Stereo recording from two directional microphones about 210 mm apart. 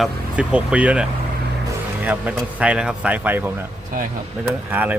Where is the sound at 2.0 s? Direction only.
5° right (ahead or behind).